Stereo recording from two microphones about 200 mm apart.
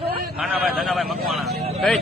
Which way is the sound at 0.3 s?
5° right (ahead or behind).